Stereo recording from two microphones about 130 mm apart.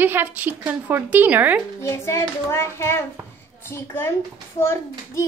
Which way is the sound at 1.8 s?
20° left (ahead or behind).